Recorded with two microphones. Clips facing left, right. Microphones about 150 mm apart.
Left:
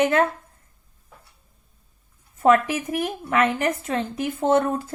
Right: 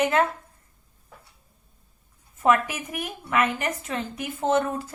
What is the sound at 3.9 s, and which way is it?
A woman's voice, 55° left (ahead or behind).